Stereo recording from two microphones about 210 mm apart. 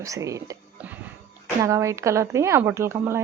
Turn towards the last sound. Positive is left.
turn(degrees=-10)  # may be behind; listen again after turning